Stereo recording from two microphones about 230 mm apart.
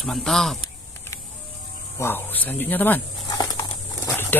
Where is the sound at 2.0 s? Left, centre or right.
Centre.